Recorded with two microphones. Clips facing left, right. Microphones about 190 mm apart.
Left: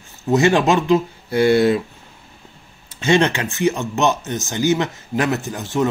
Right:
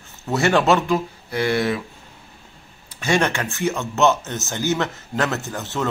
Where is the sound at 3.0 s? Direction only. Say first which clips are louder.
Left 4 dB; 20° left (ahead or behind).